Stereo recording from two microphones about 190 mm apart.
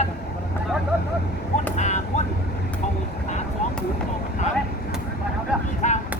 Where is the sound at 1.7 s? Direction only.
40° left (ahead or behind).